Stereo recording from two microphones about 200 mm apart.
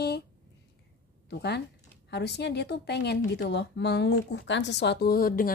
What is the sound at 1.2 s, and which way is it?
A woman's voice, 55° left (ahead or behind).